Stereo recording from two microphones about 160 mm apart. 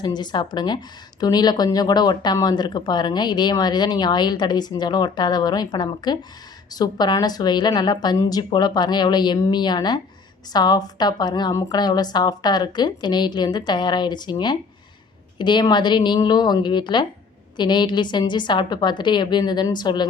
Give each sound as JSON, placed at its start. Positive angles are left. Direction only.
{"t": 0.0, "sound": "speech", "side_deg": 25}